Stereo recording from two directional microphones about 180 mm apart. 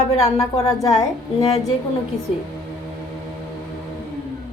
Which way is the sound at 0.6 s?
20° left (ahead or behind).